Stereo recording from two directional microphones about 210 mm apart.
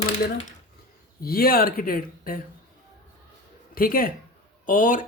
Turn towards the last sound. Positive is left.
turn(degrees=40)  # may be behind; listen again after turning